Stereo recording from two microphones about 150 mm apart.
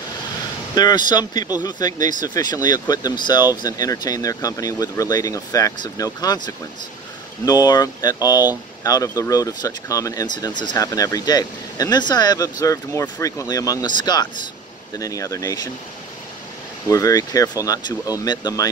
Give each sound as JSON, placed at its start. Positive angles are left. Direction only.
{"t": 0.7, "sound": "speech", "side_deg": 25}
{"t": 15.0, "sound": "speech", "side_deg": 20}
{"t": 16.9, "sound": "speech", "side_deg": 20}